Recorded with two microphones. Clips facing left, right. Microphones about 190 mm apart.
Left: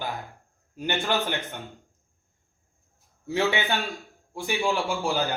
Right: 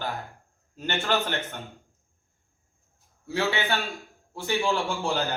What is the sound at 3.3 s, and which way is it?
A man's voice, 15° left (ahead or behind).